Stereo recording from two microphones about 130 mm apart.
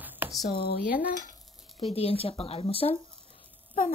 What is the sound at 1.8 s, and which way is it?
Speech, 50° left (ahead or behind).